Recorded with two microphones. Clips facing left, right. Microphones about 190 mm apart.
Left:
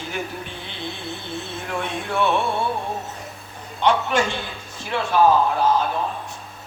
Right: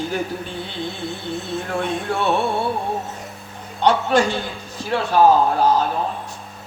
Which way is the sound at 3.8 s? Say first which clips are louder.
Right 3 dB; 40° right (ahead or behind).